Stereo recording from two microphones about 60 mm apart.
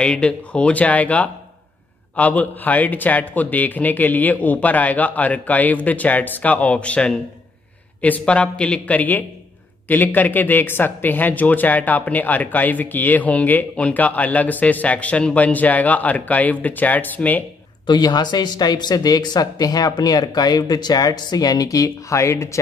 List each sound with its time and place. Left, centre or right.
0.0 s speech: centre
18.9 s speech: left